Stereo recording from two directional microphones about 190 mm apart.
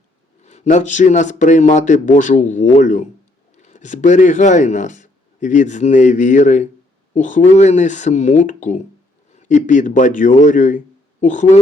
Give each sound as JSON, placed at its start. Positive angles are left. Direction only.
{"t": 0.4, "sound": "a man's voice", "side_deg": 35}